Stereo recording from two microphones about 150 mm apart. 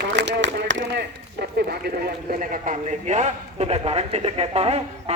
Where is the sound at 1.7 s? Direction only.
90° right.